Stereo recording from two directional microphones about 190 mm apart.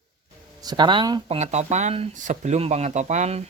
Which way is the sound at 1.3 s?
35° right (ahead or behind).